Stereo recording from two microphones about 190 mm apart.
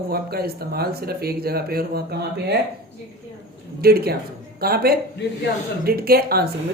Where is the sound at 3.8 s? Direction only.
55° right (ahead or behind).